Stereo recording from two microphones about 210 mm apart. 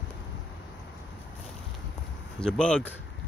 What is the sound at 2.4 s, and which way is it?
Speech, 5° left (ahead or behind).